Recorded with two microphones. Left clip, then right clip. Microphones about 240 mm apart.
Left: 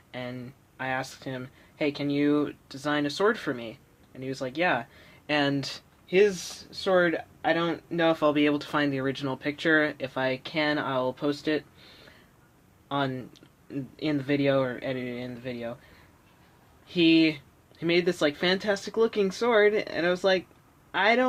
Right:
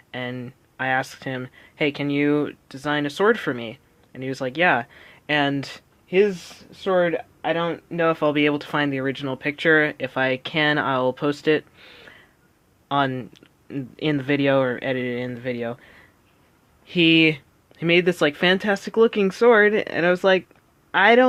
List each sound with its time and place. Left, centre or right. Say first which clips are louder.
0.1 s speech: right 6 dB; right
16.8 s speech: right 5 dB; right